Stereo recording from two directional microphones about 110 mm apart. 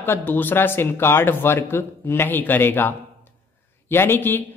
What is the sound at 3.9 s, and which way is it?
Speech, 20° left (ahead or behind).